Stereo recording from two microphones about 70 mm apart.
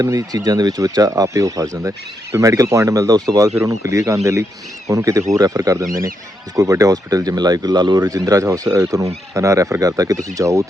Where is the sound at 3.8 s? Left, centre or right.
Right.